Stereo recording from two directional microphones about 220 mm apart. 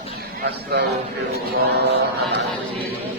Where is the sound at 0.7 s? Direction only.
50° right (ahead or behind).